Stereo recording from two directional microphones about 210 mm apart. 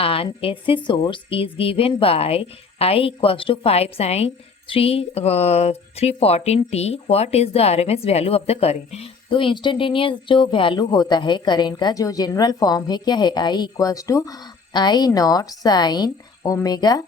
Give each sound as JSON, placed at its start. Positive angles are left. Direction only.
{"t": 0.0, "sound": "a woman's voice", "side_deg": 25}